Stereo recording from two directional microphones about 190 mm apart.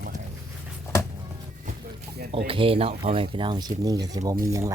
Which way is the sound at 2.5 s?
30° right (ahead or behind).